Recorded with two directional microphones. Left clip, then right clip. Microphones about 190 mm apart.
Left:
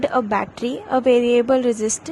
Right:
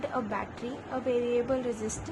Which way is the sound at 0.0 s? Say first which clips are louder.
Left 13 dB; 40° left (ahead or behind).